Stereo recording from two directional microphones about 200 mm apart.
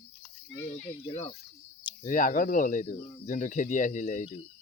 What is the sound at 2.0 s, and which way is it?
Speech, 40° left (ahead or behind).